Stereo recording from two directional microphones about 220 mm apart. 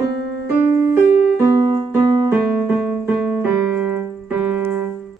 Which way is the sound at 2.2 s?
10° right (ahead or behind).